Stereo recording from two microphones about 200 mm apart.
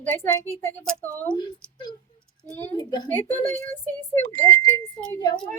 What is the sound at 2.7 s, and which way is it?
Speech, 20° left (ahead or behind).